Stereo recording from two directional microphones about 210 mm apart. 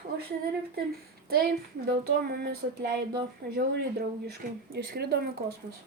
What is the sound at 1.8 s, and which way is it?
Speech, 45° right (ahead or behind).